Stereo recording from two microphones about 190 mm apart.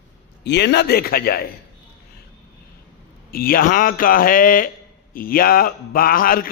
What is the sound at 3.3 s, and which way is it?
A man's voice, 50° left (ahead or behind).